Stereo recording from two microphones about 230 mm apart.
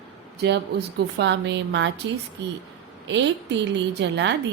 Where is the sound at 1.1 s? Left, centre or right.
Right.